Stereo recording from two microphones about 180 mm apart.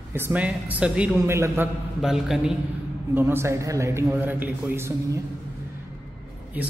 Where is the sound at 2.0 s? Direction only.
Centre (ahead or behind).